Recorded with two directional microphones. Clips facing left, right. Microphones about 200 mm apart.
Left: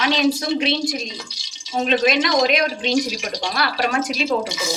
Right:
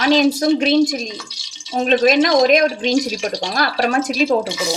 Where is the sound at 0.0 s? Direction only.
45° right (ahead or behind).